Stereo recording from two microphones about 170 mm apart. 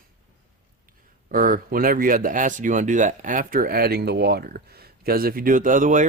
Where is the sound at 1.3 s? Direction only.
55° right (ahead or behind).